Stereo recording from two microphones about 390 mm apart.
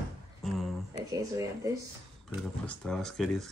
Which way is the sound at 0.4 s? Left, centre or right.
Centre.